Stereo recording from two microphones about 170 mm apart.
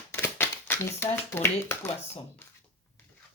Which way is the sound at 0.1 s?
10° left (ahead or behind).